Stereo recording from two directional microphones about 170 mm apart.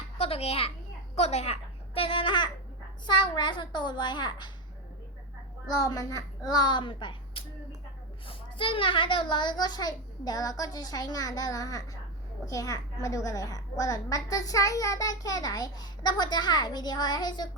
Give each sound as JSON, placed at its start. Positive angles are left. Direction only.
{"t": 0.2, "sound": "a child's voice", "side_deg": 35}
{"t": 2.0, "sound": "babbling", "side_deg": 30}
{"t": 3.1, "sound": "a child's voice", "side_deg": 25}
{"t": 5.6, "sound": "a child's voice", "side_deg": 20}